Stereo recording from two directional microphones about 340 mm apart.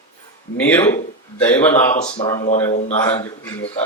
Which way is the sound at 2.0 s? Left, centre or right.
Centre.